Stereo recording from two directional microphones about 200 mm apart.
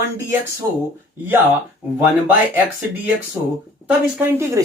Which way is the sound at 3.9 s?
5° right (ahead or behind).